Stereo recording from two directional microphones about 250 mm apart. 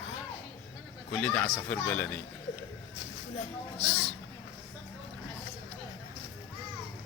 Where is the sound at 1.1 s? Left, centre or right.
Centre.